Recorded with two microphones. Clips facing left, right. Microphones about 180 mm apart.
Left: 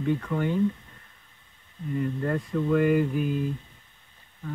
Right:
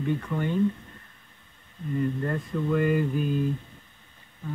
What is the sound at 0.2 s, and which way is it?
Speech, 10° left (ahead or behind).